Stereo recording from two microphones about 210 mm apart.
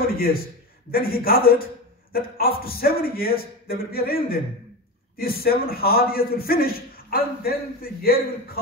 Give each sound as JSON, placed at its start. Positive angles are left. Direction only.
{"t": 0.9, "sound": "a man's voice", "side_deg": 45}